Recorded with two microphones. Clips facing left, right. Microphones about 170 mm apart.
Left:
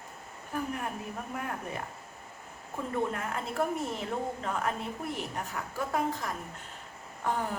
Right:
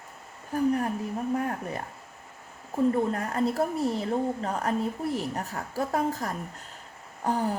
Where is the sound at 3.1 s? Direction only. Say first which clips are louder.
Right 7 dB; 40° right (ahead or behind).